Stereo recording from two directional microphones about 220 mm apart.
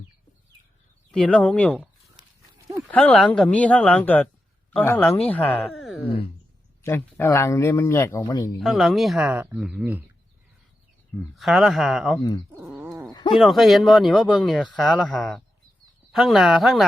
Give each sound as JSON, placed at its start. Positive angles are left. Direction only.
{"t": 1.1, "sound": "speech", "side_deg": 5}
{"t": 2.9, "sound": "speech", "side_deg": 5}
{"t": 6.0, "sound": "speech", "side_deg": 25}
{"t": 6.8, "sound": "speech", "side_deg": 10}
{"t": 8.5, "sound": "speech", "side_deg": 0}
{"t": 11.3, "sound": "speech", "side_deg": 0}
{"t": 12.5, "sound": "a sound", "side_deg": -10}
{"t": 13.3, "sound": "speech", "side_deg": 0}